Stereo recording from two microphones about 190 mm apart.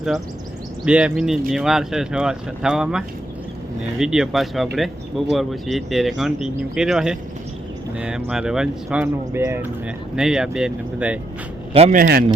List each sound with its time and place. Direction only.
0.9 s speech: 5° right (ahead or behind)
11.7 s speech: 30° right (ahead or behind)
11.9 s speech: 55° right (ahead or behind)